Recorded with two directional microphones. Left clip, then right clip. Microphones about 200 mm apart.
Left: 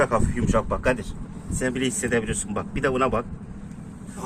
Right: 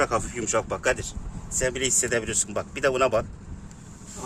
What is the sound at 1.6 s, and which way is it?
Speech, 65° right (ahead or behind).